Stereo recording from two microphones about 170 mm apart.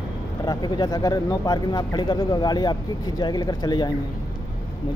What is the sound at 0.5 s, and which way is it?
Speech, 25° left (ahead or behind).